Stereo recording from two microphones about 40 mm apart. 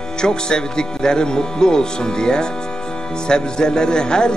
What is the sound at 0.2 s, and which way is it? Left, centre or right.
Speech, centre.